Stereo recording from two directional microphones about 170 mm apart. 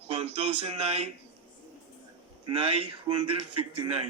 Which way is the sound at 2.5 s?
35° right (ahead or behind).